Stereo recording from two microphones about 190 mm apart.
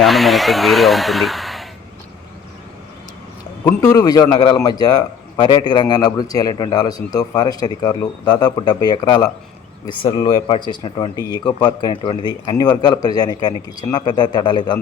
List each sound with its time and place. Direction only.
0.0 s speech: centre (ahead or behind)
3.6 s a man's voice: 15° left (ahead or behind)